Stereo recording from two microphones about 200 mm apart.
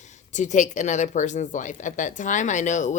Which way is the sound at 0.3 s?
35° left (ahead or behind).